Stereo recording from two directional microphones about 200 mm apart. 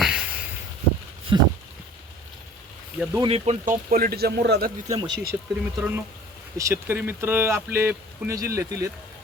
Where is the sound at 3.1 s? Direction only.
25° right (ahead or behind).